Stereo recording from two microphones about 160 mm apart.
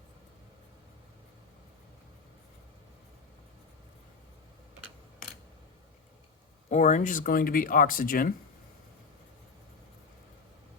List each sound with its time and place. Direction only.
6.7 s speech: 50° left (ahead or behind)